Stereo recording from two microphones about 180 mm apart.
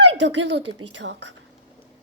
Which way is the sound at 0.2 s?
80° right.